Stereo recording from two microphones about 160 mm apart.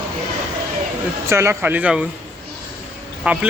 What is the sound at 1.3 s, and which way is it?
Speech, 15° right (ahead or behind).